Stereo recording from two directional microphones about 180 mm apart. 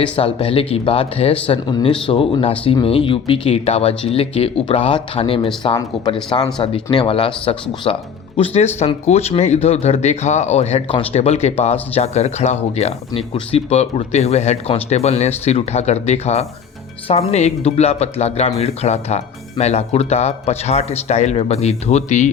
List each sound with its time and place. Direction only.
0.2 s speech: 30° left (ahead or behind)